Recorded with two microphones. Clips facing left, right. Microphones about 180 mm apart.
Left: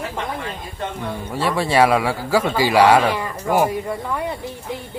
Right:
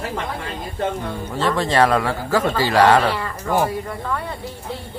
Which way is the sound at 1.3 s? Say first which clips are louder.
Even; 10° left (ahead or behind).